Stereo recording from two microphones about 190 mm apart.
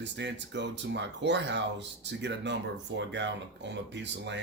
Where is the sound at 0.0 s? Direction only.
65° right (ahead or behind).